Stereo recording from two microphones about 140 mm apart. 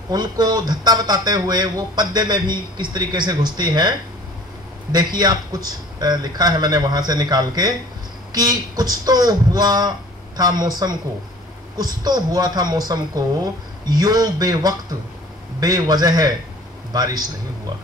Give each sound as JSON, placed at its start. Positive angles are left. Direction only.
{"t": 0.1, "sound": "speech", "side_deg": -30}
{"t": 4.9, "sound": "speech", "side_deg": -30}